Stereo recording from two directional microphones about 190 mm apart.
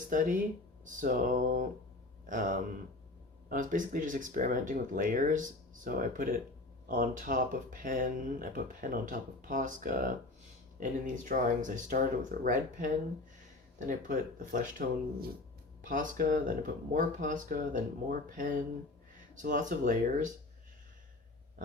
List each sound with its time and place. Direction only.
0.1 s speech: 45° right (ahead or behind)